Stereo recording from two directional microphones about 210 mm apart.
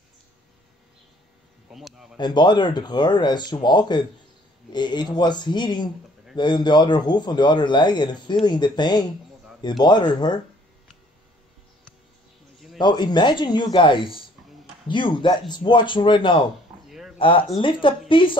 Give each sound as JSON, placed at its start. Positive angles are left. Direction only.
{"t": 1.7, "sound": "speech", "side_deg": 0}
{"t": 2.1, "sound": "a man's voice", "side_deg": 20}
{"t": 12.7, "sound": "a man's voice", "side_deg": 20}